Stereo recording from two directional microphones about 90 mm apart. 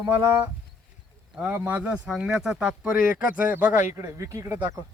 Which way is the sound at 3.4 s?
20° right (ahead or behind).